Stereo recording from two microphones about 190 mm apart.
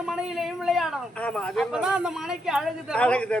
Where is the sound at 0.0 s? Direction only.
5° right (ahead or behind).